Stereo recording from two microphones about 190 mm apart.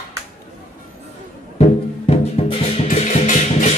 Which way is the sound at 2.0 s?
30° left (ahead or behind).